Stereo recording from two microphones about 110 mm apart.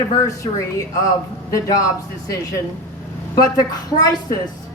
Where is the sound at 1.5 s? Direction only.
35° left (ahead or behind).